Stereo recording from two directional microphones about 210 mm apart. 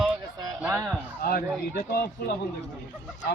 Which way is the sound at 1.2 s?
45° left (ahead or behind).